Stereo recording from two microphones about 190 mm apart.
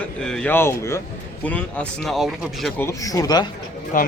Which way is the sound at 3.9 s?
45° left (ahead or behind).